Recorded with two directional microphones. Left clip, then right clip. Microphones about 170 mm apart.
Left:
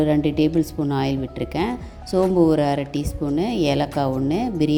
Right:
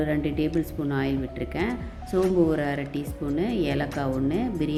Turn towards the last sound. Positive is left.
turn(degrees=30)  # may be behind; listen again after turning